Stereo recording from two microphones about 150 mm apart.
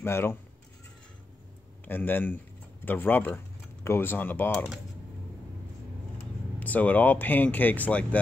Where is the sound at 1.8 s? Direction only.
15° left (ahead or behind).